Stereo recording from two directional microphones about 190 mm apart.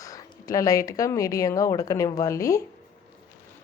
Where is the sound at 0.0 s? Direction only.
15° left (ahead or behind).